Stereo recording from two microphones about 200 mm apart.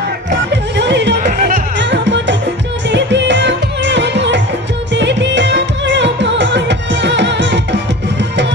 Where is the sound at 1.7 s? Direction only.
60° right (ahead or behind).